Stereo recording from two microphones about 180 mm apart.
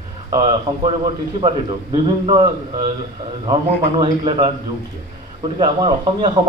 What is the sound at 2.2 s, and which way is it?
Speech, 25° right (ahead or behind).